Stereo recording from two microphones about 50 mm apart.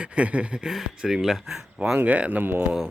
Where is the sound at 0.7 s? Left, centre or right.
Centre.